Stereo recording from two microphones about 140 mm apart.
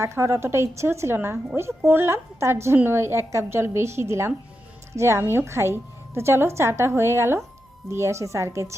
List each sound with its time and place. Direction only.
0.0 s a woman's voice: 20° right (ahead or behind)